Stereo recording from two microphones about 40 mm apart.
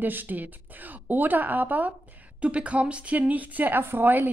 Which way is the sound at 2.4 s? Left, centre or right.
Right.